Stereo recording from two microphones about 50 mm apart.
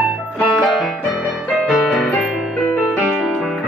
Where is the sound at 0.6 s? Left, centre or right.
Centre.